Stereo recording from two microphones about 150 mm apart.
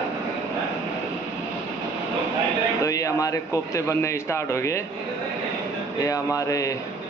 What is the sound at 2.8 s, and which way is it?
Speech, 20° left (ahead or behind).